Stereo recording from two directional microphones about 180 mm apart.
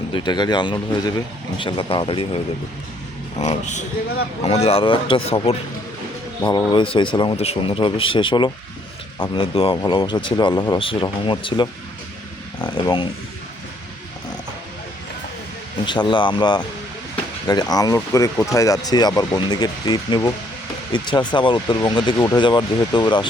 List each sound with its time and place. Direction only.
0.1 s speech: 25° left (ahead or behind)
3.4 s speech: 40° left (ahead or behind)
15.9 s speech: 25° left (ahead or behind)